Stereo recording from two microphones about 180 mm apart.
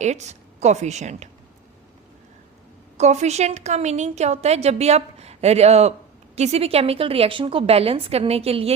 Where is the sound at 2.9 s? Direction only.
40° right (ahead or behind).